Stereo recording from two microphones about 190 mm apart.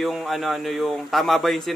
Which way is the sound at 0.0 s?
Centre (ahead or behind).